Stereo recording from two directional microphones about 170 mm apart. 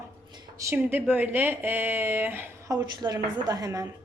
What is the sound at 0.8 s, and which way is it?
A woman's voice, 10° right (ahead or behind).